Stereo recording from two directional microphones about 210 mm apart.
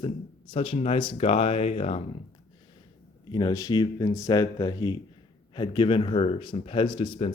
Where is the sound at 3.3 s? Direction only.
20° left (ahead or behind).